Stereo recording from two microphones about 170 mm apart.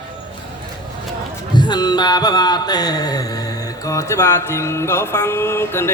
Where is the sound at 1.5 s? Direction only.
25° left (ahead or behind).